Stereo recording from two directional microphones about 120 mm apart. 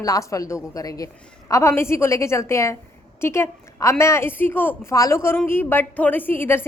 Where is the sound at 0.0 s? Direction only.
30° left (ahead or behind).